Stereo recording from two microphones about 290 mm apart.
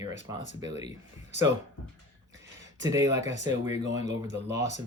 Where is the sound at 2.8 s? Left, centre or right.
Centre.